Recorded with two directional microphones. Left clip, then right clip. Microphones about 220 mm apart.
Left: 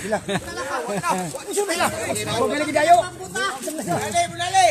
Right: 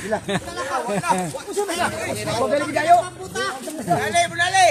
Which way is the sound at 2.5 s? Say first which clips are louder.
Even; 45° left (ahead or behind).